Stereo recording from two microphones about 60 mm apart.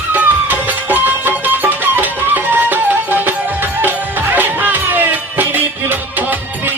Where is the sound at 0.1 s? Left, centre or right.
Right.